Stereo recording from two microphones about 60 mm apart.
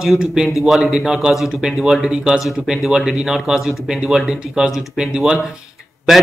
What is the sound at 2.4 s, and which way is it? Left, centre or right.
Speech, centre.